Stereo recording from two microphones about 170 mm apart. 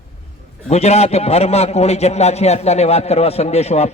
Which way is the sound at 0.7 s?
40° left (ahead or behind).